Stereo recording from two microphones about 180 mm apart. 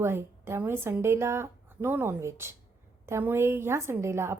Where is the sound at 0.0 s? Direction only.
15° right (ahead or behind).